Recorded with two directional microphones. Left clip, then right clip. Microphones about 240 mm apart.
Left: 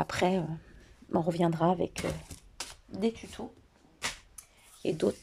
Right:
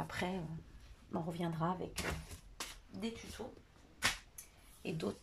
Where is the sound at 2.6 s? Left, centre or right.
Left.